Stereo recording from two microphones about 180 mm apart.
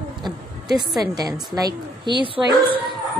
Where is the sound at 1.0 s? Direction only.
20° right (ahead or behind).